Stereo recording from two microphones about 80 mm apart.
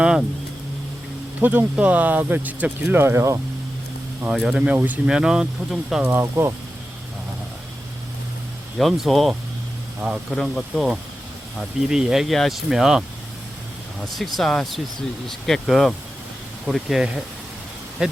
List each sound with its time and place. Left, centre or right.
0.0 s vehicle: centre
1.4 s speech: right
4.4 s speech: centre
4.7 s speech: right
5.0 s speech: centre
6.0 s speech: right
8.8 s speech: centre
10.3 s speech: centre
14.3 s speech: centre